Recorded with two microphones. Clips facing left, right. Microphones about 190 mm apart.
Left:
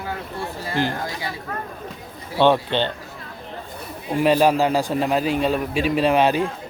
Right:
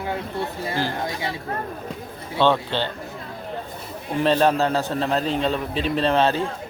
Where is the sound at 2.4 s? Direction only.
15° left (ahead or behind).